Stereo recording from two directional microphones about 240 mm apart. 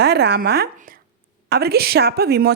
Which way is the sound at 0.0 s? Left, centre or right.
Right.